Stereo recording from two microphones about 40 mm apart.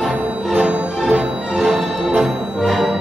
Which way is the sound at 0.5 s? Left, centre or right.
Right.